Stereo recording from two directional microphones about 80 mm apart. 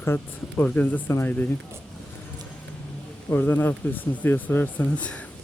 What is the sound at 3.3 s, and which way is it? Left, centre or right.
Speech, left.